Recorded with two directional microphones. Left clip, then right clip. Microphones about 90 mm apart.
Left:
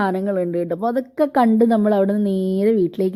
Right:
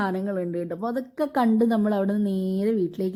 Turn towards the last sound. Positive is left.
turn(degrees=30)  # may be behind; listen again after turning